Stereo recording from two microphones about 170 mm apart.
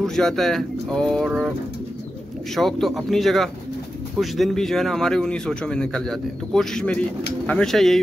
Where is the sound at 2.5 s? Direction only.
Centre (ahead or behind).